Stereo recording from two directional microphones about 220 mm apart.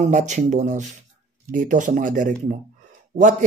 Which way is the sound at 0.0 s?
35° right (ahead or behind).